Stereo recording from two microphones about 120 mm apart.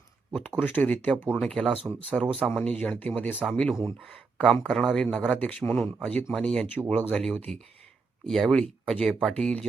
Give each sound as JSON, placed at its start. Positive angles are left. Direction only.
{"t": 0.3, "sound": "a man's voice", "side_deg": 10}
{"t": 4.1, "sound": "a sound", "side_deg": 5}
{"t": 4.6, "sound": "a man's voice", "side_deg": 0}